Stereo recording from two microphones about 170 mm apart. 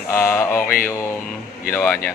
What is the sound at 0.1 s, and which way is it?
Mantra, 15° left (ahead or behind).